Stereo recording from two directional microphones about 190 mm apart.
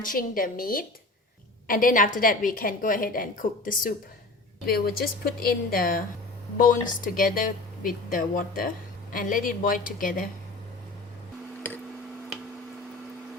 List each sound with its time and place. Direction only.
0.0 s a woman's voice: 45° left (ahead or behind)